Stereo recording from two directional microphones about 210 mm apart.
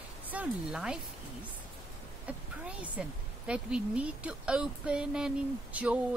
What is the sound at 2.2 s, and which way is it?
A woman's voice, 5° right (ahead or behind).